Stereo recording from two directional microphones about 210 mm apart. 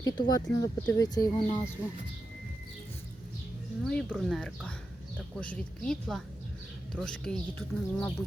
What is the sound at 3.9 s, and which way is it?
Speech, centre (ahead or behind).